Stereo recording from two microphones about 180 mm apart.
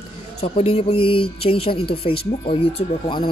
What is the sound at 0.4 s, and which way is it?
A woman's voice, 35° left (ahead or behind).